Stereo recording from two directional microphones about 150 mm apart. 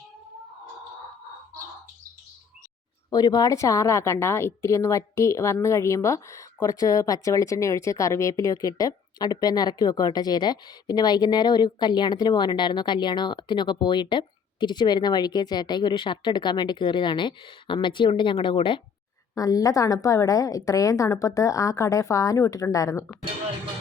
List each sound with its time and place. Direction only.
3.1 s a woman's voice: 25° left (ahead or behind)